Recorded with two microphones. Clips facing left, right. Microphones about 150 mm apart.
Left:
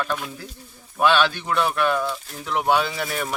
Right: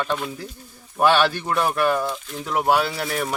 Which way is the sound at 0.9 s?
10° right (ahead or behind).